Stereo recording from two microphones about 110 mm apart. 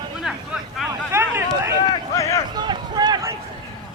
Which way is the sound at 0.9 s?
25° right (ahead or behind).